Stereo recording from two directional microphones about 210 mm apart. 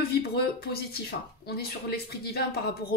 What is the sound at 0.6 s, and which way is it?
Speech, 50° left (ahead or behind).